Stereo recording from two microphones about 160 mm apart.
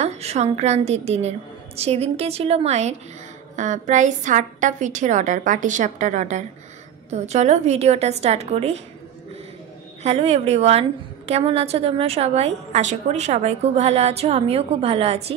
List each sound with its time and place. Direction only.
0.0 s a woman's voice: 40° right (ahead or behind)
10.0 s a woman's voice: 40° right (ahead or behind)